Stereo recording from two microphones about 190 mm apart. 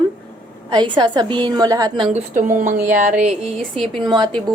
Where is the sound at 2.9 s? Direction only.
40° right (ahead or behind).